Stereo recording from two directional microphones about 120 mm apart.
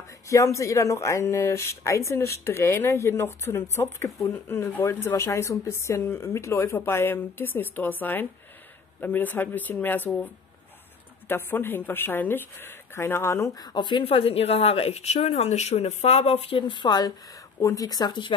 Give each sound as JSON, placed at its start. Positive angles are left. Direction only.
{"t": 0.3, "sound": "a woman's voice", "side_deg": 25}
{"t": 13.7, "sound": "speech", "side_deg": 40}
{"t": 17.6, "sound": "speech", "side_deg": 25}